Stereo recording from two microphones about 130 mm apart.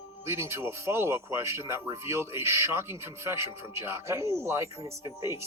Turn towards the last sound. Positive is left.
turn(degrees=-20)  # may be behind; listen again after turning